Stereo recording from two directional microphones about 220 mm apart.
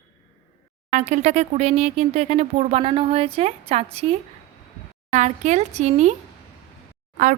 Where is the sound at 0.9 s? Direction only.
30° right (ahead or behind).